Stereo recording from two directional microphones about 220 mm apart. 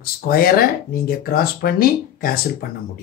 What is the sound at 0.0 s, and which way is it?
Speech, 45° left (ahead or behind).